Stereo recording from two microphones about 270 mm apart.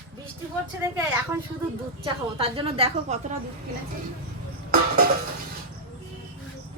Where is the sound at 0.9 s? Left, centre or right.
Centre.